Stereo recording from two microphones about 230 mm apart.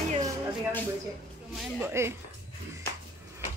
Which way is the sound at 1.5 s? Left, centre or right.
Centre.